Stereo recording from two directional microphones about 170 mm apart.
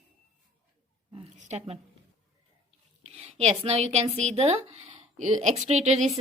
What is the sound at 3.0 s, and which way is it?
A woman's voice, 40° right (ahead or behind).